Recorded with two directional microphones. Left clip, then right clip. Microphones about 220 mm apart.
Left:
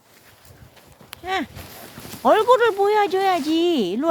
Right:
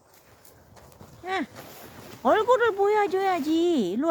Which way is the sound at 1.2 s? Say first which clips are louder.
Left 4 dB; 20° left (ahead or behind).